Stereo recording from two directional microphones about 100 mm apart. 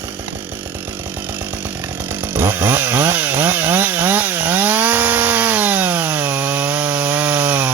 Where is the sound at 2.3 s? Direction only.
20° right (ahead or behind).